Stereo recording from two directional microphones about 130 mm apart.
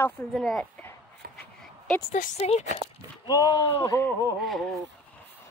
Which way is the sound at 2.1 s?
90° left.